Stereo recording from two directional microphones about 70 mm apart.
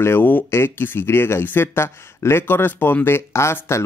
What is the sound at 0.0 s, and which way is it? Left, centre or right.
Speech, left.